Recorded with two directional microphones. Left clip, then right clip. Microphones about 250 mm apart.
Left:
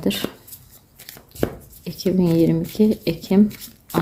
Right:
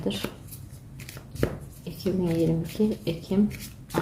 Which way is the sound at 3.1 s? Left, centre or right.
Left.